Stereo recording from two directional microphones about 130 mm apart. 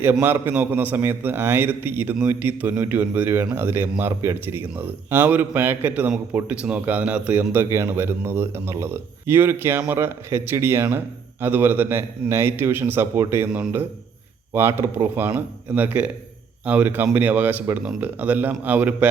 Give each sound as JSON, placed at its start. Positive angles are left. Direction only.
{"t": 0.0, "sound": "speech", "side_deg": -15}